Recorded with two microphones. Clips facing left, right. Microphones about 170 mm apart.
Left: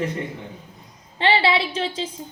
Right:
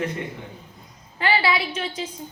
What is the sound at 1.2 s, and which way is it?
Speech, 25° left (ahead or behind).